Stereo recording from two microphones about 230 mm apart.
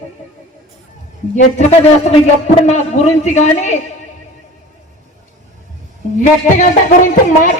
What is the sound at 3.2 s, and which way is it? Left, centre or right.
Speech, left.